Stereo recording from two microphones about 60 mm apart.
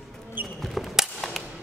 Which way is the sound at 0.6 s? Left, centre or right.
Centre.